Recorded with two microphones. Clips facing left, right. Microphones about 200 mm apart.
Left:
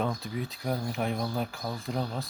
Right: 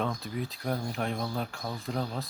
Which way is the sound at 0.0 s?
Centre (ahead or behind).